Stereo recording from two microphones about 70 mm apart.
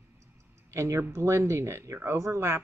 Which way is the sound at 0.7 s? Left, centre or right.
Right.